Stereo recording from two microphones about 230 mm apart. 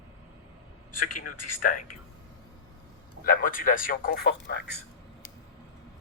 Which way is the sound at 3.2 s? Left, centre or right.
Left.